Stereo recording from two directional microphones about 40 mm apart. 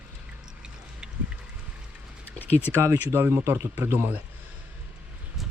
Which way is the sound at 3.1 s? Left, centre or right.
Right.